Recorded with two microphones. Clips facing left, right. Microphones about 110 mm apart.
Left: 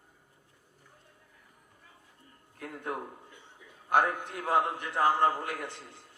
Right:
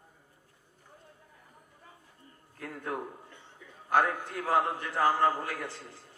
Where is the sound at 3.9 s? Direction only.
20° left (ahead or behind).